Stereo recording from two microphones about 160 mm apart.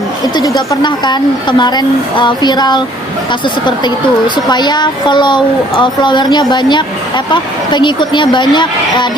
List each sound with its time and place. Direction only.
0.7 s a woman's voice: 25° left (ahead or behind)
4.4 s a woman's voice: 25° left (ahead or behind)